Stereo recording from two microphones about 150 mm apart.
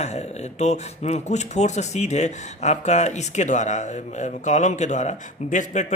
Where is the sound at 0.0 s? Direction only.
50° left (ahead or behind).